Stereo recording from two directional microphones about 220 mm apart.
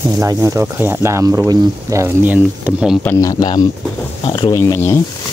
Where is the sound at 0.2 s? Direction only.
15° right (ahead or behind).